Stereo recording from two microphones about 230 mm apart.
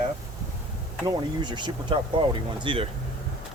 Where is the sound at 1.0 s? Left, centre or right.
Centre.